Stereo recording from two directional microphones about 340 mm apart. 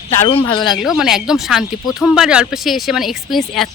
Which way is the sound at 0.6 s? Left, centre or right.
Centre.